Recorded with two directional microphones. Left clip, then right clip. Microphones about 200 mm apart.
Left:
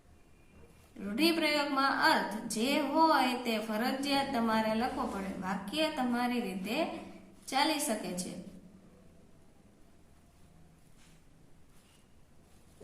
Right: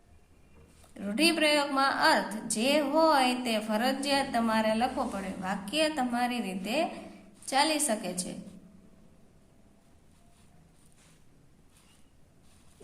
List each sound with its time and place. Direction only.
0.9 s a woman's voice: 45° right (ahead or behind)